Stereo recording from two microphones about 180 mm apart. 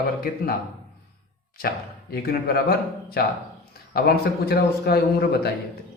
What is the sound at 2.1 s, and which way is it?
Speech, 60° left (ahead or behind).